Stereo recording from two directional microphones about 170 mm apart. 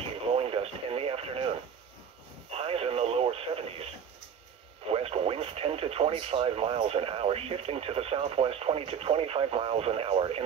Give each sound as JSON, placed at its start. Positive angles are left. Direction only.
{"t": 0.3, "sound": "radio", "side_deg": -35}
{"t": 2.5, "sound": "radio", "side_deg": -35}
{"t": 4.8, "sound": "speech", "side_deg": -35}